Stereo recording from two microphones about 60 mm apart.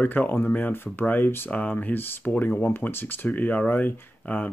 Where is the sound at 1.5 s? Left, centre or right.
Left.